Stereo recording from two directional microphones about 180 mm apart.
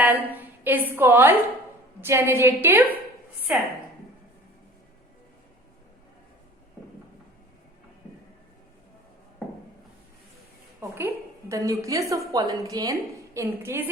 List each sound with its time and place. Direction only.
0.3 s a woman's voice: 10° right (ahead or behind)
10.8 s a woman's voice: 15° right (ahead or behind)